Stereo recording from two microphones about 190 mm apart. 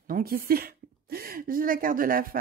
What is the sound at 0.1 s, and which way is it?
Speech, 50° right (ahead or behind).